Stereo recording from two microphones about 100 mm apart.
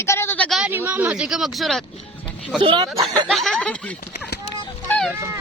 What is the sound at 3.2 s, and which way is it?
Speech, centre (ahead or behind).